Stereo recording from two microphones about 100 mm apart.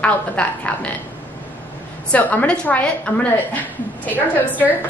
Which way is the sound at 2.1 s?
15° left (ahead or behind).